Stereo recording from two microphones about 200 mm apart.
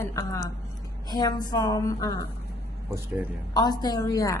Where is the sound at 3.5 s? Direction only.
20° left (ahead or behind).